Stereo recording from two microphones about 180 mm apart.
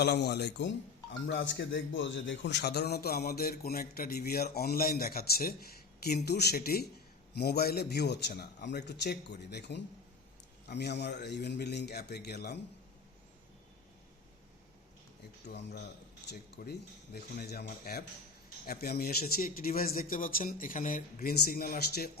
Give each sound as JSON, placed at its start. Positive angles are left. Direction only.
{"t": 0.0, "sound": "a man's voice", "side_deg": 70}
{"t": 1.3, "sound": "a man's voice", "side_deg": 80}
{"t": 15.4, "sound": "a man's voice", "side_deg": 65}